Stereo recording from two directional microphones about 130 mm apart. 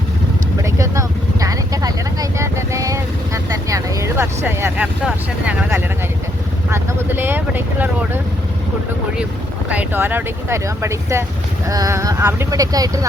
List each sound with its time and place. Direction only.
0.6 s vehicle: 25° right (ahead or behind)
5.0 s speech: 10° right (ahead or behind)
6.7 s speech: 20° right (ahead or behind)
9.6 s speech: 15° right (ahead or behind)